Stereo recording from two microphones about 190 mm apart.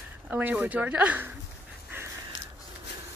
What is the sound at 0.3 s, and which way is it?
Speech, 10° right (ahead or behind).